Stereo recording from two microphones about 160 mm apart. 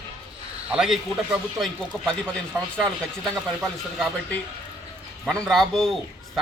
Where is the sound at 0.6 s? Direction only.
5° right (ahead or behind).